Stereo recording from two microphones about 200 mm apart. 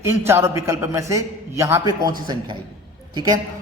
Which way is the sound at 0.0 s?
15° right (ahead or behind).